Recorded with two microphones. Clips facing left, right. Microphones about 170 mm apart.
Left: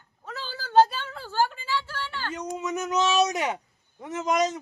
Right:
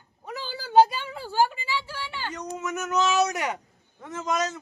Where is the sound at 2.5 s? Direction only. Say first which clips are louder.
Even; 15° left (ahead or behind).